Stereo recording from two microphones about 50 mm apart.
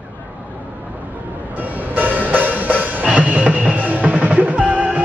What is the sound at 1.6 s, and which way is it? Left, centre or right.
Music, right.